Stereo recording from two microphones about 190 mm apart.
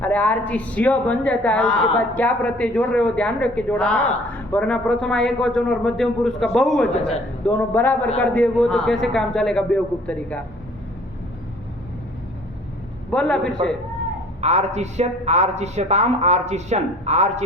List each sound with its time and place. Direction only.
0.0 s a man's voice: 10° left (ahead or behind)
13.1 s speech: 5° left (ahead or behind)
14.4 s speech: 35° right (ahead or behind)